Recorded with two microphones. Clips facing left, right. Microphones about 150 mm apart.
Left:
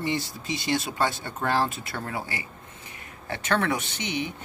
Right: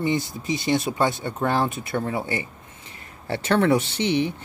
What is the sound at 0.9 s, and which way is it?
Speech, 25° right (ahead or behind).